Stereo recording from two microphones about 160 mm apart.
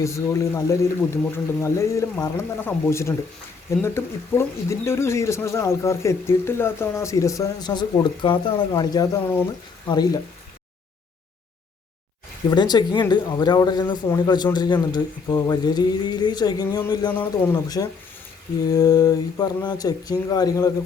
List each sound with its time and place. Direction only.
0.0 s speech: 20° left (ahead or behind)
12.5 s speech: 25° left (ahead or behind)
17.1 s speech: 10° left (ahead or behind)
17.5 s speech: 25° left (ahead or behind)